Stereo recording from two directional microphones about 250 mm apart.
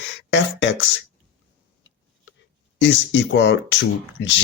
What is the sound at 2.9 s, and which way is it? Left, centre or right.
Speech, left.